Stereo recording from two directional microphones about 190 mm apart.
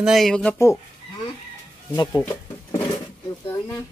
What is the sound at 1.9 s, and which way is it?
Speech, 20° left (ahead or behind).